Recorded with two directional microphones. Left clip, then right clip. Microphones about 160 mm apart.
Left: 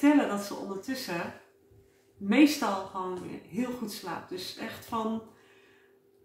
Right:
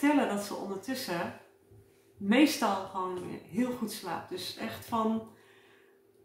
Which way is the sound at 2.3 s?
10° right (ahead or behind).